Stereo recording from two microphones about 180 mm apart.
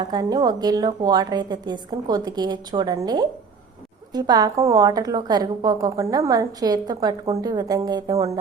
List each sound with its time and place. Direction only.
0.0 s a woman's voice: 25° right (ahead or behind)